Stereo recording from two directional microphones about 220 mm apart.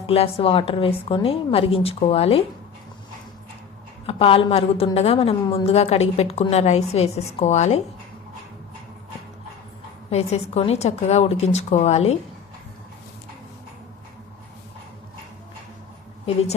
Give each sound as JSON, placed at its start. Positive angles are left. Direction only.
{"t": 0.0, "sound": "a woman's voice", "side_deg": 25}
{"t": 4.0, "sound": "a woman's voice", "side_deg": 25}
{"t": 10.1, "sound": "a woman's voice", "side_deg": 30}